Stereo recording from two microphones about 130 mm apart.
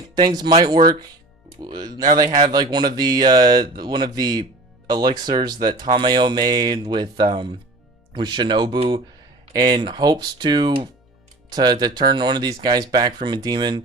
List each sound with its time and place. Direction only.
0.2 s speech: 35° right (ahead or behind)